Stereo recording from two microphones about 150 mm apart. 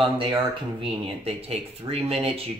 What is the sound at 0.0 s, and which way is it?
Speech, 35° right (ahead or behind).